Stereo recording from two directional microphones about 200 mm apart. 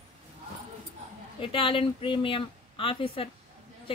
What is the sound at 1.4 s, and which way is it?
Speech, 25° left (ahead or behind).